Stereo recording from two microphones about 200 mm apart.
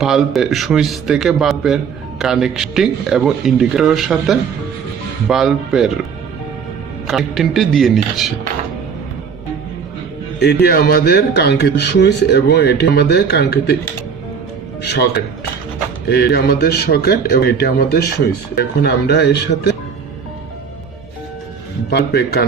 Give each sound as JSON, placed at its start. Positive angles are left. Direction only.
{"t": 0.0, "sound": "a man's voice", "side_deg": 0}
{"t": 7.1, "sound": "a man's voice", "side_deg": 0}
{"t": 10.4, "sound": "speech", "side_deg": 50}
{"t": 14.8, "sound": "speech", "side_deg": 55}
{"t": 16.0, "sound": "a man's voice", "side_deg": 55}
{"t": 21.8, "sound": "a man's voice", "side_deg": 55}